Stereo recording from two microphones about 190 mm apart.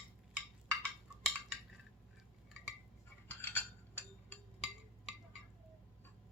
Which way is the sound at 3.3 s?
10° left (ahead or behind).